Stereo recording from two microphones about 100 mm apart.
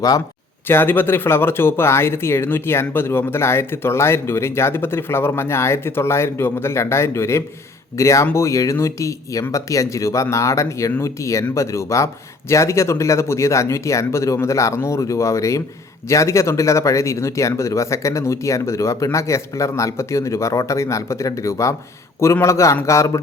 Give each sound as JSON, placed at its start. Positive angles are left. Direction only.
{"t": 0.7, "sound": "speech", "side_deg": 20}